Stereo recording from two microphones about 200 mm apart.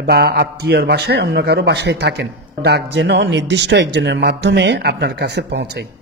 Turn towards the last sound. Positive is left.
turn(degrees=-60)  # may be behind; listen again after turning